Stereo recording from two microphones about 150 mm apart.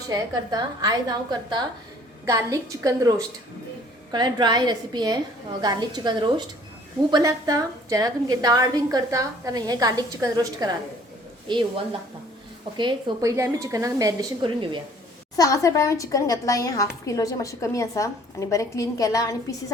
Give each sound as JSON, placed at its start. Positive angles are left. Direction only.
{"t": 0.1, "sound": "a woman's voice", "side_deg": -25}
{"t": 12.7, "sound": "a woman's voice", "side_deg": -30}
{"t": 13.3, "sound": "a woman's voice", "side_deg": -20}
{"t": 15.4, "sound": "a woman's voice", "side_deg": 20}